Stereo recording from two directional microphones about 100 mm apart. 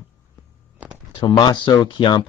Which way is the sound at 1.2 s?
45° left (ahead or behind).